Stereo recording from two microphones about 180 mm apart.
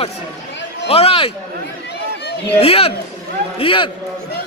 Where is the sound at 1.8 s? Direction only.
70° left (ahead or behind).